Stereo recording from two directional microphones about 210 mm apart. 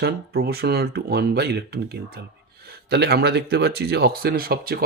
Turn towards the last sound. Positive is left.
turn(degrees=-45)  # may be behind; listen again after turning